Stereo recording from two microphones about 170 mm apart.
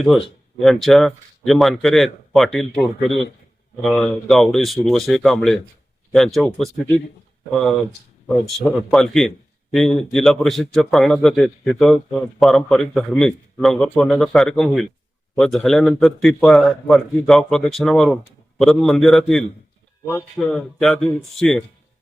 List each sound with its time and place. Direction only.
0.6 s a man's voice: centre (ahead or behind)